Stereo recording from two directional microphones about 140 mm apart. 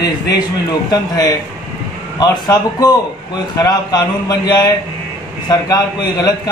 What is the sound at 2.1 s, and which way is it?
Speech, 30° left (ahead or behind).